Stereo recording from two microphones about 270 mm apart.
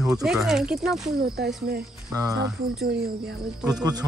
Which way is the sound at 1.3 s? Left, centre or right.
Right.